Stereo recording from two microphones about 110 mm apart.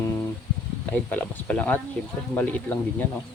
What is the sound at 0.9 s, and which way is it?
Speech, 15° left (ahead or behind).